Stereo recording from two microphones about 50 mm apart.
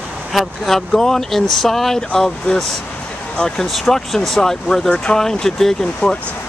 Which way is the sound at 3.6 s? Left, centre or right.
Centre.